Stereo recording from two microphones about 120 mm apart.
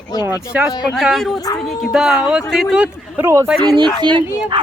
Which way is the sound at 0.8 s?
Centre (ahead or behind).